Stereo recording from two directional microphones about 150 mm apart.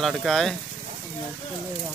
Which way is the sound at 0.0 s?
Centre (ahead or behind).